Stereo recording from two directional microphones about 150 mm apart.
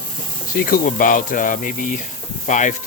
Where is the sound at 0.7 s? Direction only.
65° left (ahead or behind).